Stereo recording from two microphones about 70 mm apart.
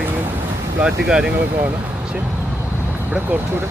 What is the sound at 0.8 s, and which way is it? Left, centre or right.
Speech, centre.